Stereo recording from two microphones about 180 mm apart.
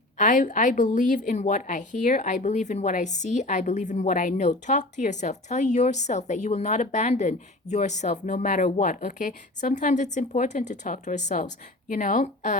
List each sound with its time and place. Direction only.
0.2 s a woman's voice: 45° left (ahead or behind)